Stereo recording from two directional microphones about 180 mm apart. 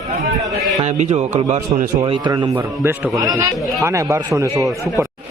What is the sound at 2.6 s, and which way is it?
Speech, 10° right (ahead or behind).